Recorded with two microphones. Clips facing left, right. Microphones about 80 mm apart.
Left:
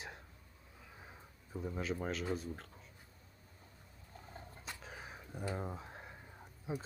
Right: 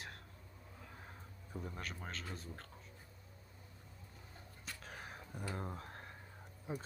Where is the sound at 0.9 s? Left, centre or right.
Centre.